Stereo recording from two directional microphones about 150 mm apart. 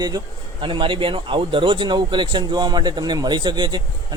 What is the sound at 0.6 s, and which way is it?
Speech, 35° right (ahead or behind).